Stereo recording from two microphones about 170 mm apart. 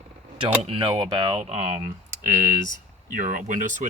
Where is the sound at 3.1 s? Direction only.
50° right (ahead or behind).